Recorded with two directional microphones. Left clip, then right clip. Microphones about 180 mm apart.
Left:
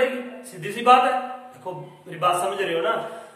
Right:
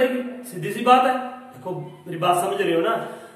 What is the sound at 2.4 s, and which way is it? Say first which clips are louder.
Speech: right 2 dB; 20° left (ahead or behind).